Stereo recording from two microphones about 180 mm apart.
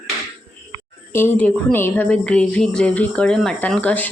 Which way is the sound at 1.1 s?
10° left (ahead or behind).